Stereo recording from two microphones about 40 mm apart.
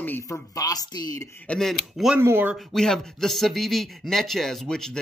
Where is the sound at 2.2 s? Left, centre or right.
Right.